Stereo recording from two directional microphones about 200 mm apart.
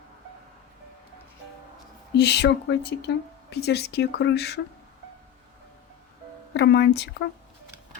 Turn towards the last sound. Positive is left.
turn(degrees=55)  # may be behind; listen again after turning